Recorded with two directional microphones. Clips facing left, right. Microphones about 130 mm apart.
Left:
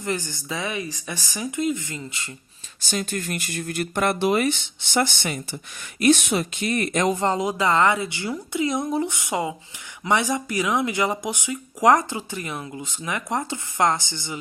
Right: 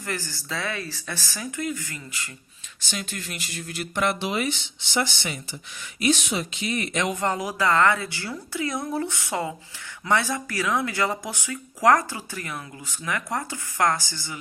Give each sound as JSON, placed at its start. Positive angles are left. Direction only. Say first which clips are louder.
{"t": 0.0, "sound": "speech", "louder": "left 5 dB", "side_deg": 20}
{"t": 2.8, "sound": "speech", "louder": "left 6 dB", "side_deg": 40}
{"t": 7.2, "sound": "speech", "louder": "left 3 dB", "side_deg": 25}